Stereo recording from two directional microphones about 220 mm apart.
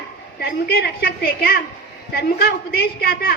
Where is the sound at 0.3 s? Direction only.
45° left (ahead or behind).